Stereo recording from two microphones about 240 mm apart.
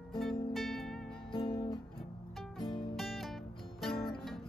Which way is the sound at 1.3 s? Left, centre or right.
Left.